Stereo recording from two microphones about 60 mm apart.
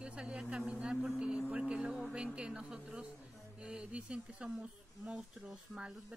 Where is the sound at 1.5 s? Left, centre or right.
Centre.